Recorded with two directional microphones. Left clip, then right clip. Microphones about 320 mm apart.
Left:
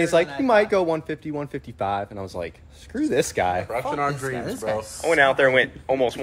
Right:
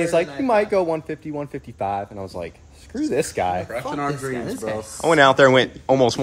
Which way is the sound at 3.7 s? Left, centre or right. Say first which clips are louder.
Left 1 dB; left.